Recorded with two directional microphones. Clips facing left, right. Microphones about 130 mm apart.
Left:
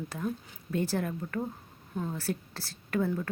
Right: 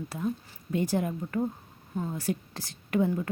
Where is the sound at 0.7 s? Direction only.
15° right (ahead or behind).